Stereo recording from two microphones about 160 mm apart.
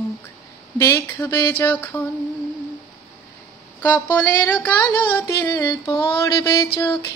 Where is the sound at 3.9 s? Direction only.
10° left (ahead or behind).